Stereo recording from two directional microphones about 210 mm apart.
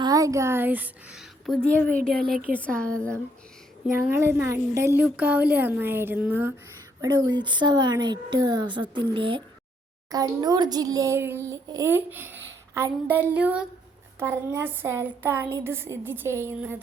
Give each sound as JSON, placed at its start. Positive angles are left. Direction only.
{"t": 0.0, "sound": "a woman's voice", "side_deg": -15}
{"t": 3.9, "sound": "a child's voice", "side_deg": -10}